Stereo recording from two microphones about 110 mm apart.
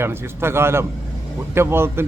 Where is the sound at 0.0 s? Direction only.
20° right (ahead or behind).